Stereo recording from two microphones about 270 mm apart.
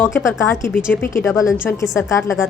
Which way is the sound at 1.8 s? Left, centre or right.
Centre.